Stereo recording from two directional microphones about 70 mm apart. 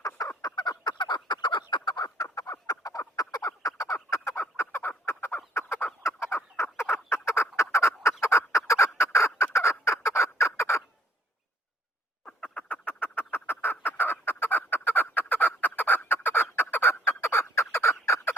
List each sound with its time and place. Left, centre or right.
0.4 s fowl: left
2.3 s a sound: left
4.4 s fowl: left
8.2 s turkey: left
12.2 s duck: left